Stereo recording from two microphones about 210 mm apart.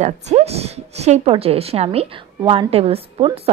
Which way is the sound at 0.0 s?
30° right (ahead or behind).